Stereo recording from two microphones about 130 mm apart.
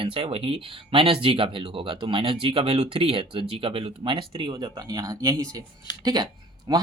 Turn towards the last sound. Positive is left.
turn(degrees=-30)  # may be behind; listen again after turning